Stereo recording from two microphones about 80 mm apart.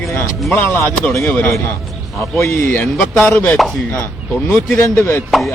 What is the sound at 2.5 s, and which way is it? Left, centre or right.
Speech, left.